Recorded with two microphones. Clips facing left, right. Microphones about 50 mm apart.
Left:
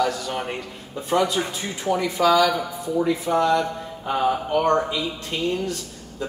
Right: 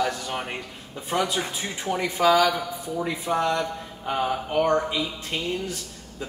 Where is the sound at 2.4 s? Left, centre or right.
Centre.